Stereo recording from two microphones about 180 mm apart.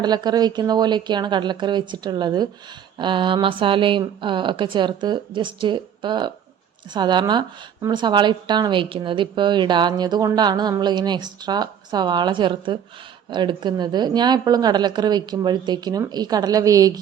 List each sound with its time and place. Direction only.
0.0 s speech: 25° right (ahead or behind)